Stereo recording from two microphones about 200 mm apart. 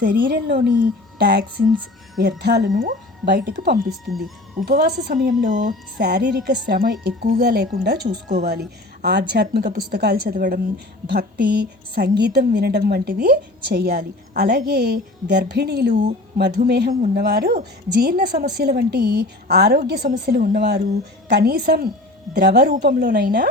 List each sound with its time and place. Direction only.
0.0 s a woman's voice: 50° right (ahead or behind)
3.8 s speech: centre (ahead or behind)
4.6 s a woman's voice: 50° right (ahead or behind)